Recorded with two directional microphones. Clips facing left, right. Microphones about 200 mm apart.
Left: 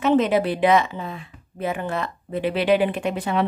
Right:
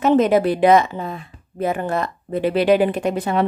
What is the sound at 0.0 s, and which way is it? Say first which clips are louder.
A woman's voice: right 3 dB; 40° right (ahead or behind).